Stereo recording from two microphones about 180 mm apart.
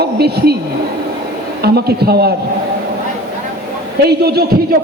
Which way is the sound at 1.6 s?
65° right (ahead or behind).